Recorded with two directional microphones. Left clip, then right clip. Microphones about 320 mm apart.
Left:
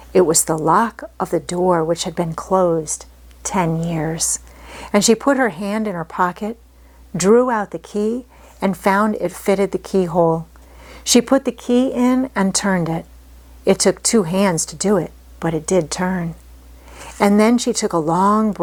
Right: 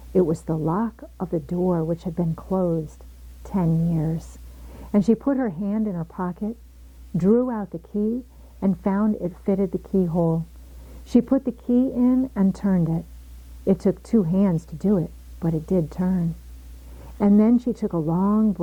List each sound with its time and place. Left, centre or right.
0.1 s speech: centre
11.0 s speech: centre